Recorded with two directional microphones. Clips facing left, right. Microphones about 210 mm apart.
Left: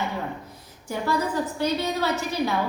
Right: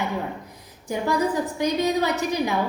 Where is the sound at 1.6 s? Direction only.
15° right (ahead or behind).